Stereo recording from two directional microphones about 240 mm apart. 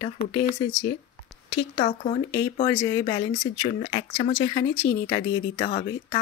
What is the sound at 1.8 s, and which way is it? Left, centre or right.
Speech, left.